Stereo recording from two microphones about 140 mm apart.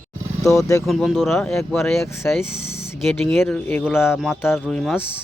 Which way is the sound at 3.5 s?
15° left (ahead or behind).